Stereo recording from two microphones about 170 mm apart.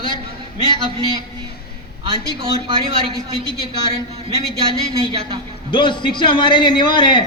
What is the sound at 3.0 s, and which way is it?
Speech, 30° right (ahead or behind).